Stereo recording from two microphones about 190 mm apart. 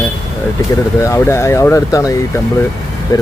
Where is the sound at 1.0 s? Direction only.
15° left (ahead or behind).